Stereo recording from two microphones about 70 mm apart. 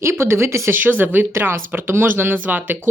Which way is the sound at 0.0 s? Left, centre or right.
Right.